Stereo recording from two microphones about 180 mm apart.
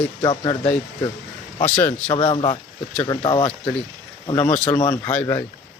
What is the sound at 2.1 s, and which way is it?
Speech, 25° left (ahead or behind).